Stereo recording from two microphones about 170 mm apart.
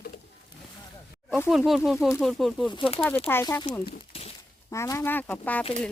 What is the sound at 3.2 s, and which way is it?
Speech, 15° left (ahead or behind).